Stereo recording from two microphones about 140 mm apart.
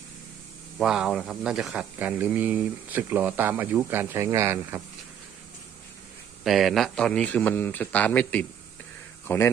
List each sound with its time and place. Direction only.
0.8 s speech: 5° right (ahead or behind)
6.4 s speech: centre (ahead or behind); by 9.5 s 15° left (ahead or behind)